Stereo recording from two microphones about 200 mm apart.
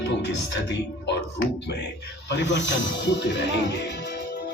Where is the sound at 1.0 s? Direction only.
60° left (ahead or behind).